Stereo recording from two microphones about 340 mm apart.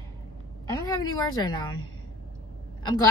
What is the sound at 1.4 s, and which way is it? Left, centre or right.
Speech, centre.